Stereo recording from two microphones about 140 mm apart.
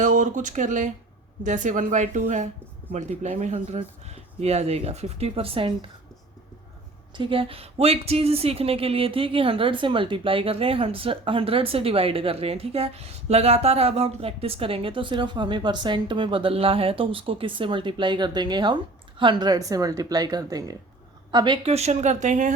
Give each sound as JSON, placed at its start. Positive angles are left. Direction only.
{"t": 0.0, "sound": "speech", "side_deg": -65}
{"t": 7.1, "sound": "a woman's voice", "side_deg": -40}